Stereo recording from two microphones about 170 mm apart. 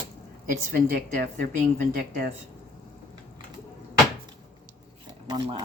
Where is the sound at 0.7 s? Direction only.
50° right (ahead or behind).